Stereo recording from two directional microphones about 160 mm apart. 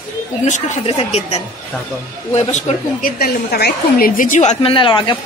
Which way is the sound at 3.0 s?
70° left (ahead or behind).